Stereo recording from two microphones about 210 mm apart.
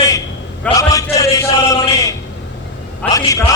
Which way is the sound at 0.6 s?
15° left (ahead or behind).